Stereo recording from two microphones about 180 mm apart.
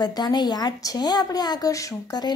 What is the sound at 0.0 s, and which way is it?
A woman's voice, 25° left (ahead or behind).